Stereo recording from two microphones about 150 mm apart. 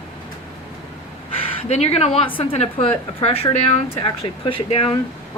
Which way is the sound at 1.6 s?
45° left (ahead or behind).